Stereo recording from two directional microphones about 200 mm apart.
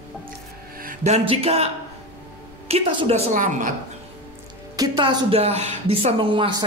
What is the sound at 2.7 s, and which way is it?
A woman's voice, 25° right (ahead or behind).